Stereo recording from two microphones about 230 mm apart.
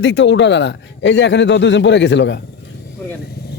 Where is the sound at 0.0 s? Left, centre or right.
Left.